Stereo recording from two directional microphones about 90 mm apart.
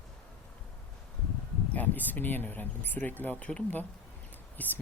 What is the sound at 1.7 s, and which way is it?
Speech, 20° left (ahead or behind).